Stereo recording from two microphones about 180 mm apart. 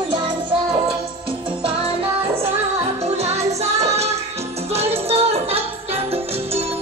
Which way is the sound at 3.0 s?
35° right (ahead or behind).